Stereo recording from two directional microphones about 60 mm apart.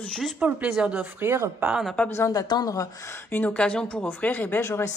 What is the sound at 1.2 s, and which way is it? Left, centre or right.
Speech, right.